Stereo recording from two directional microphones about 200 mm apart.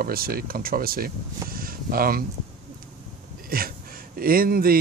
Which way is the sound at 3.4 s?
45° right (ahead or behind).